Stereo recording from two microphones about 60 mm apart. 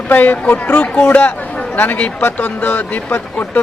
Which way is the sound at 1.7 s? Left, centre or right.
Left.